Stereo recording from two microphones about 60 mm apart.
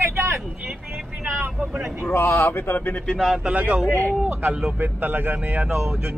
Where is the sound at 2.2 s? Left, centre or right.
Left.